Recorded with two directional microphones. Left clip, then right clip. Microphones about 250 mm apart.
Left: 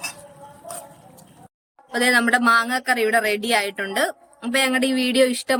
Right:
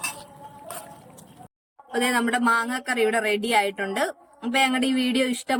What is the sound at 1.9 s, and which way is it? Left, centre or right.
Speech, centre.